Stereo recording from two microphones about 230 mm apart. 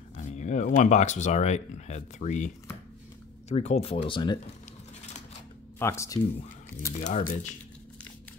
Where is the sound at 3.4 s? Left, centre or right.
Left.